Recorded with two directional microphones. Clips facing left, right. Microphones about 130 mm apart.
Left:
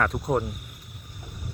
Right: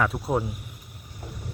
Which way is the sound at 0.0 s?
5° right (ahead or behind).